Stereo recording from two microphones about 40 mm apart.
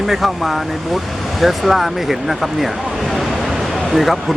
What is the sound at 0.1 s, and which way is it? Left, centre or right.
Speech, centre.